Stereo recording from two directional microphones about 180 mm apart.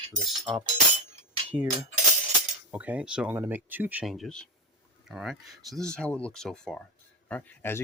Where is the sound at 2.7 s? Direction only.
10° right (ahead or behind).